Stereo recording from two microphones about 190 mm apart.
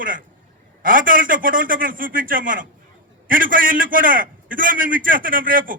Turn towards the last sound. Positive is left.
turn(degrees=-45)  # may be behind; listen again after turning